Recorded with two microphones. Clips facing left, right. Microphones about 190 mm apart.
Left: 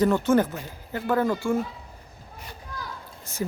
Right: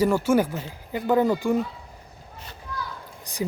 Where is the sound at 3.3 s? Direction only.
15° right (ahead or behind).